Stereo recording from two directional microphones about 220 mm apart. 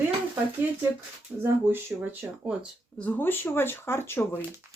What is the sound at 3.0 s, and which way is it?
Speech, 10° left (ahead or behind).